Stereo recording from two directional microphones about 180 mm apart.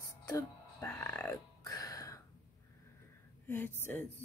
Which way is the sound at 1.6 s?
20° left (ahead or behind).